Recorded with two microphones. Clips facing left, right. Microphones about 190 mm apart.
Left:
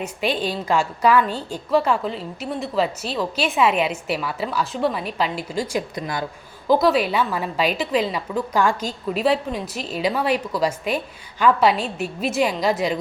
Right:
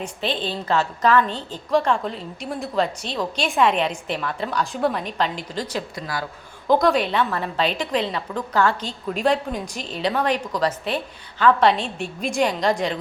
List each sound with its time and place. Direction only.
0.0 s a woman's voice: 10° left (ahead or behind)
6.0 s speech: 20° left (ahead or behind)
6.7 s a woman's voice: 5° left (ahead or behind)